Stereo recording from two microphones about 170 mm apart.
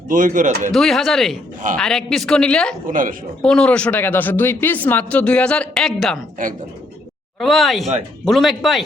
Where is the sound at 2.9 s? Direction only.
55° right (ahead or behind).